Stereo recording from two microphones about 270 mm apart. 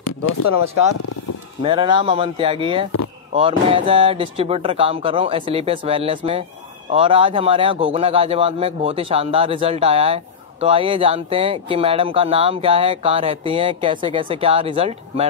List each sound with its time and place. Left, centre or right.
1.6 s a man's voice: centre